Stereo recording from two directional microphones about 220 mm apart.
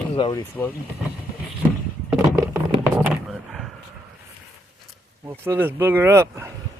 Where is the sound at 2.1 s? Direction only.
10° right (ahead or behind).